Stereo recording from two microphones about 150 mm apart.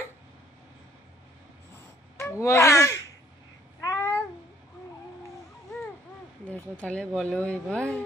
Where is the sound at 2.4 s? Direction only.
20° left (ahead or behind).